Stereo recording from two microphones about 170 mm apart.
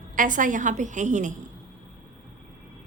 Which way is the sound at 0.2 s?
50° right (ahead or behind).